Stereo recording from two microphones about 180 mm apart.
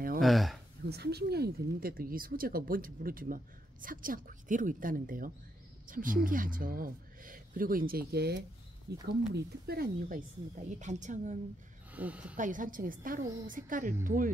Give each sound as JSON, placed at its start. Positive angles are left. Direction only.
{"t": 0.2, "sound": "speech", "side_deg": 0}
{"t": 0.8, "sound": "a woman's voice", "side_deg": -65}
{"t": 11.9, "sound": "speech", "side_deg": -10}
{"t": 12.4, "sound": "speech", "side_deg": -45}